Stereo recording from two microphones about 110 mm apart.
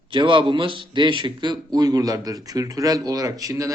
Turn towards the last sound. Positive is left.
turn(degrees=-30)  # may be behind; listen again after turning